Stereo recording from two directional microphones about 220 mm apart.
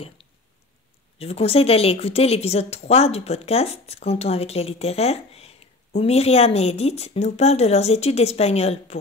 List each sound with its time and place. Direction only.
1.1 s a woman's voice: 25° left (ahead or behind)